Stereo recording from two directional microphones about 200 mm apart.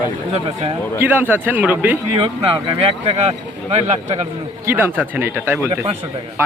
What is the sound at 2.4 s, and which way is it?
A man's voice, 25° right (ahead or behind).